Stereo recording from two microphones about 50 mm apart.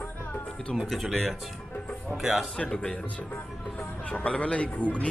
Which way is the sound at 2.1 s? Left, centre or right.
Centre.